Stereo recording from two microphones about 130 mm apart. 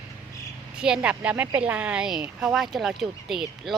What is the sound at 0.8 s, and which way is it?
Speech, 10° right (ahead or behind).